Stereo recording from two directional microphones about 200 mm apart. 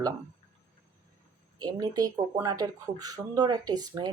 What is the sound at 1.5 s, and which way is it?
Speech, 20° right (ahead or behind).